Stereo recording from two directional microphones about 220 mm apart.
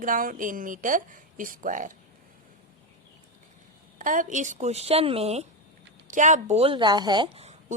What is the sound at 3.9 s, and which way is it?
A woman's voice, 35° right (ahead or behind).